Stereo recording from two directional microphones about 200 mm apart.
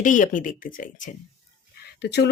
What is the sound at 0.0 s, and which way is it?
Speech, 40° left (ahead or behind).